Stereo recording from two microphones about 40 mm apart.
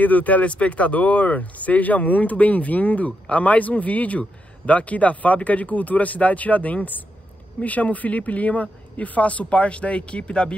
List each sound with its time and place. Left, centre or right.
0.0 s speech: left